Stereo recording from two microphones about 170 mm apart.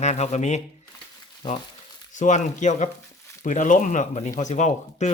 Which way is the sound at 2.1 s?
45° left (ahead or behind).